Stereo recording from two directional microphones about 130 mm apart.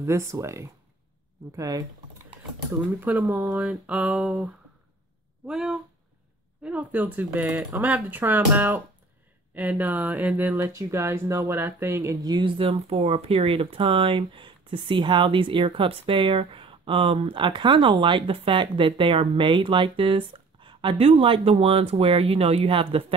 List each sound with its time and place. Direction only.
0.0 s speech: 20° right (ahead or behind)
2.8 s speech: 10° right (ahead or behind)
5.5 s speech: 5° right (ahead or behind); by 23.1 s 45° right (ahead or behind)